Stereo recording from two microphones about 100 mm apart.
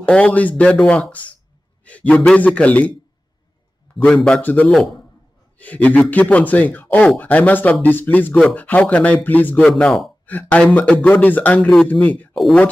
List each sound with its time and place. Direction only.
0.0 s speech: 15° left (ahead or behind)
4.0 s speech: 10° left (ahead or behind)
10.2 s speech: 15° left (ahead or behind)